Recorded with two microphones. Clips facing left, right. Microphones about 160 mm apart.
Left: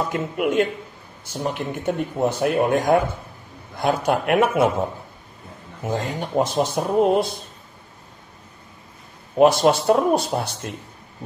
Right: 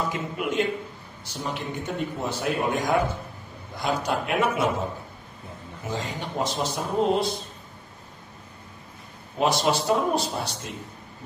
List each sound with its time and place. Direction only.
0.1 s speech: 55° left (ahead or behind)
5.9 s speech: 50° left (ahead or behind)
9.4 s speech: 55° left (ahead or behind)